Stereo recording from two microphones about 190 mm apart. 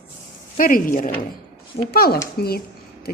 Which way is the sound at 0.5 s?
45° left (ahead or behind).